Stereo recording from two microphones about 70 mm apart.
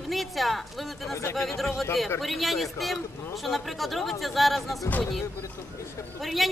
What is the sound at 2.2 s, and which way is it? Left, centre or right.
Speech, centre.